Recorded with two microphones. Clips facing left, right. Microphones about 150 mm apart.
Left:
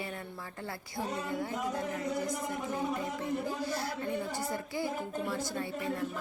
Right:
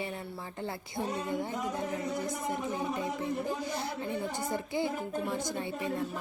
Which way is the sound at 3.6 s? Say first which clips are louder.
Even; 20° right (ahead or behind).